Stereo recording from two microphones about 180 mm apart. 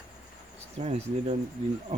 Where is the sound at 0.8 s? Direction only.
35° right (ahead or behind).